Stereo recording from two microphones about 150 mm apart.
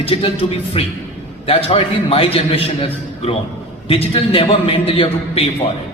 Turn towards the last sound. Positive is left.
turn(degrees=40)  # may be behind; listen again after turning